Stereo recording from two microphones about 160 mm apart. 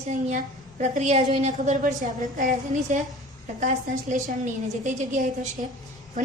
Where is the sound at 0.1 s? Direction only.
50° right (ahead or behind).